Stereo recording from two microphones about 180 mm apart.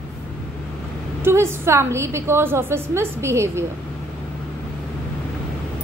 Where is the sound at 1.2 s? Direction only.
15° right (ahead or behind).